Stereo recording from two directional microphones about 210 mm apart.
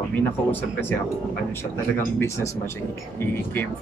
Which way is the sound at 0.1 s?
10° left (ahead or behind).